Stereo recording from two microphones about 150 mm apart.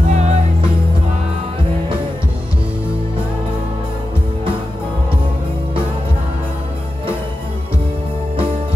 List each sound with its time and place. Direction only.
0.1 s music: 50° right (ahead or behind)